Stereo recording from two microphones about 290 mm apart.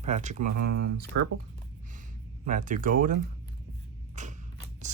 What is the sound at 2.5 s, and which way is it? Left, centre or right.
Speech, right.